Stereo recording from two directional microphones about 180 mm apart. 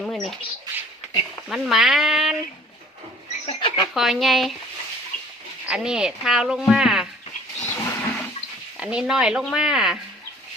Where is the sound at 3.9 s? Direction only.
Centre (ahead or behind).